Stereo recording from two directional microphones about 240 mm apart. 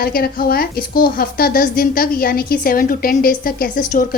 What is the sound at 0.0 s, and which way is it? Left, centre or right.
A woman's voice, left.